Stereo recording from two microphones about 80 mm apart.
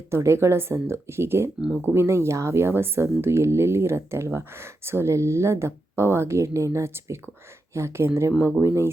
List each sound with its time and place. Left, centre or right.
0.1 s speech: right